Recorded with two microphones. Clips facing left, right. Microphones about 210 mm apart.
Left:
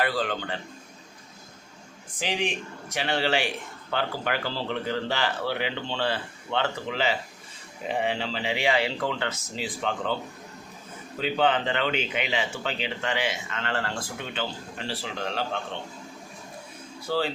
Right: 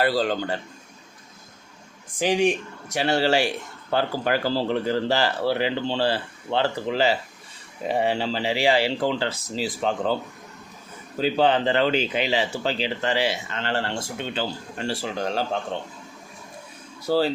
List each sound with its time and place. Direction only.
0.0 s speech: 35° right (ahead or behind)
2.9 s speech: 40° right (ahead or behind)
11.2 s speech: 35° right (ahead or behind)
14.8 s speech: 45° right (ahead or behind)
17.1 s speech: 40° right (ahead or behind)